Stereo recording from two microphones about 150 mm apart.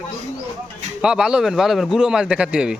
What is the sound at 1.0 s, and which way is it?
A man's voice, 5° right (ahead or behind).